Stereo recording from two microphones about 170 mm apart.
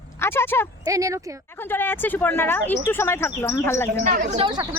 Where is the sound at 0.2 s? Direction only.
15° left (ahead or behind).